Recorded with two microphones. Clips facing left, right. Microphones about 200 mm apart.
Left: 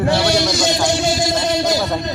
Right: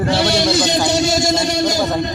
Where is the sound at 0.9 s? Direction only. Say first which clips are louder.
Right 2 dB; 45° right (ahead or behind).